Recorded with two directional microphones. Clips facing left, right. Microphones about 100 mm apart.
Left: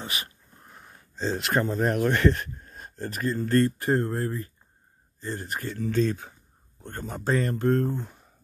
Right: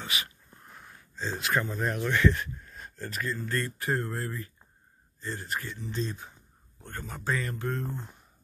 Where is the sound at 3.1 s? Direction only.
40° left (ahead or behind); by 6.3 s 60° left (ahead or behind).